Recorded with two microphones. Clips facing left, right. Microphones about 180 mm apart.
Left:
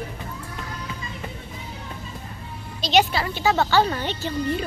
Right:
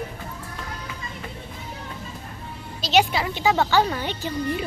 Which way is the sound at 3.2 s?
20° right (ahead or behind).